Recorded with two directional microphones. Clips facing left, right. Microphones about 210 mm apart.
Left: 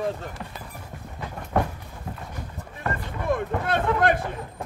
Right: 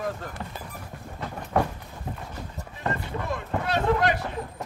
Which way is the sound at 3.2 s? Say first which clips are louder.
Left 6 dB; 55° left (ahead or behind).